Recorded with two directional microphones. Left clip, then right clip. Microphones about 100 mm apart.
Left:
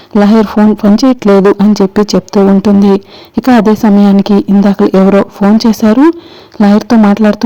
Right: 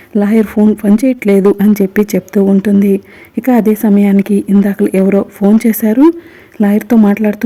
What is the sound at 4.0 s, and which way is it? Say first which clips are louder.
A woman's voice: left 4 dB; 30° left (ahead or behind).